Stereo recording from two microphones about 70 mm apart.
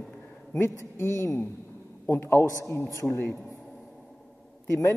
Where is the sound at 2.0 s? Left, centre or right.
Left.